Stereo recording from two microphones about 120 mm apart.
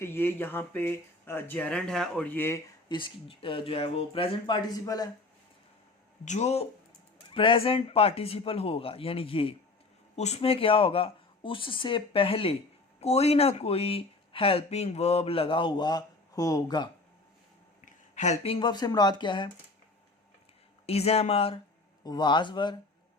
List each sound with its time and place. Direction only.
0.0 s speech: 20° left (ahead or behind); by 2.3 s 5° left (ahead or behind)
2.3 s speech: 20° left (ahead or behind)
2.9 s speech: 45° left (ahead or behind)
6.2 s speech: 70° left (ahead or behind)
7.3 s speech: 50° left (ahead or behind)
10.2 s speech: 65° left (ahead or behind); by 16.9 s 35° left (ahead or behind)
17.8 s a sound: 85° left
18.4 s speech: 50° left (ahead or behind)
18.7 s speech: 35° left (ahead or behind)
20.8 s speech: 60° left (ahead or behind)
22.0 s speech: 35° left (ahead or behind)